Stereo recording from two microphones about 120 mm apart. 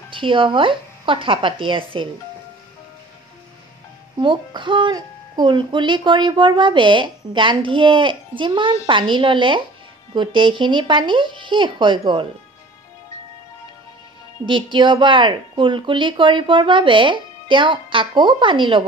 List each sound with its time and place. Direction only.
0.1 s speech: 45° right (ahead or behind)
4.2 s speech: 40° right (ahead or behind)
14.4 s speech: 40° right (ahead or behind)